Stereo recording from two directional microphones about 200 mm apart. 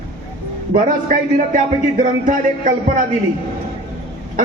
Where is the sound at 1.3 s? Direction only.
40° right (ahead or behind).